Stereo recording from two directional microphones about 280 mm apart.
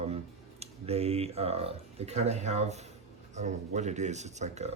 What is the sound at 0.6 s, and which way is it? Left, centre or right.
Speech, right.